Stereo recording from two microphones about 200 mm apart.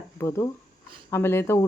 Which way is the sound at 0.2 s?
15° left (ahead or behind).